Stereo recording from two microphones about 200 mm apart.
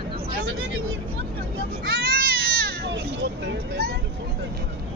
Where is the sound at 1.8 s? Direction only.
50° right (ahead or behind).